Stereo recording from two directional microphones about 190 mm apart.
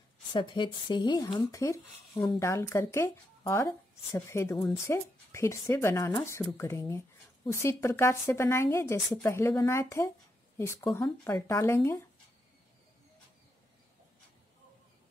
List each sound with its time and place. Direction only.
0.3 s a woman's voice: 25° left (ahead or behind)